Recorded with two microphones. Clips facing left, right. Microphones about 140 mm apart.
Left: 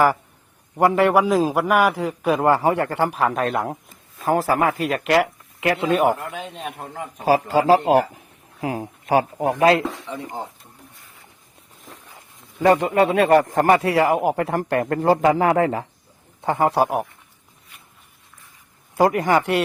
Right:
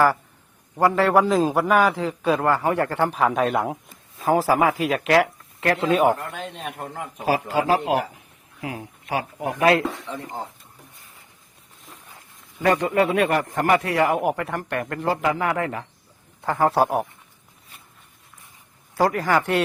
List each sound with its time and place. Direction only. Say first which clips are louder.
0.8 s a man's voice: left 2 dB; 15° left (ahead or behind)
2.5 s speech: left 6 dB; 25° left (ahead or behind)
3.1 s speech: right 1 dB; centre (ahead or behind)
7.3 s a man's voice: left 4 dB; 35° left (ahead or behind)
8.6 s a man's voice: left 6 dB; 35° left (ahead or behind)
12.6 s a man's voice: left 3 dB; 30° left (ahead or behind)
16.4 s a man's voice: left 2 dB; 20° left (ahead or behind)
16.6 s a man's voice: even; 10° left (ahead or behind)
18.9 s a man's voice: left 3 dB; 20° left (ahead or behind)